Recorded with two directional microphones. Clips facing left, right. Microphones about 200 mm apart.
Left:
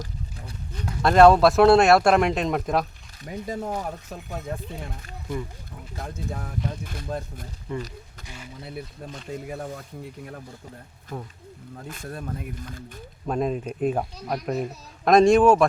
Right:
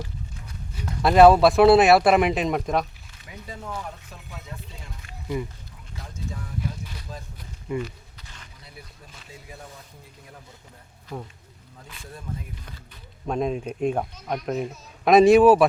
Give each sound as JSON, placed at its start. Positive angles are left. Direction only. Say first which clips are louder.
{"t": 0.8, "sound": "speech", "louder": "right 1 dB", "side_deg": -5}
{"t": 3.2, "sound": "speech", "louder": "left 8 dB", "side_deg": 40}
{"t": 6.0, "sound": "speech", "louder": "left 4 dB", "side_deg": 55}
{"t": 9.3, "sound": "speech", "louder": "left 11 dB", "side_deg": 60}
{"t": 11.1, "sound": "speech", "louder": "even", "side_deg": 0}
{"t": 11.8, "sound": "speech", "louder": "left 7 dB", "side_deg": 50}
{"t": 13.2, "sound": "speech", "louder": "even", "side_deg": 0}